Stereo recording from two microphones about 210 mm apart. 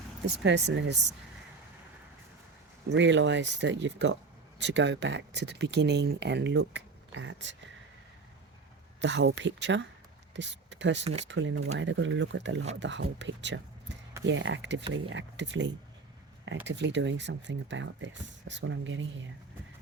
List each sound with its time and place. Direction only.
0.3 s speech: 55° right (ahead or behind)
2.9 s speech: 60° right (ahead or behind)
9.0 s speech: 60° right (ahead or behind)
11.0 s speech: 30° right (ahead or behind)
11.3 s speech: 60° right (ahead or behind)